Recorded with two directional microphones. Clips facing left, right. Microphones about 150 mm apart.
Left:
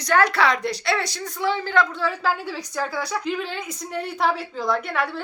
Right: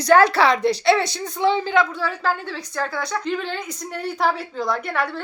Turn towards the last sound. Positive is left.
turn(degrees=0)  # may be behind; listen again after turning